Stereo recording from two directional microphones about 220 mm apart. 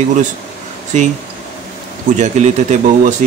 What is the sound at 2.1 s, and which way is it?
Speech, 30° right (ahead or behind).